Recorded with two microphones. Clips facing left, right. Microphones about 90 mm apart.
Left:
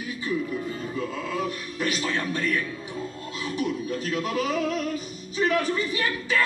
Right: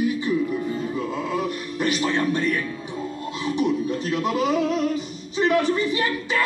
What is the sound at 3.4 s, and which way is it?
Music, 25° right (ahead or behind).